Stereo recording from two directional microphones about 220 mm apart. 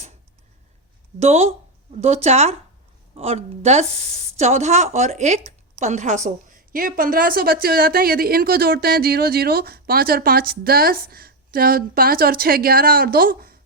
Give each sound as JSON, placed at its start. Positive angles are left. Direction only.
{"t": 1.2, "sound": "a woman's voice", "side_deg": -30}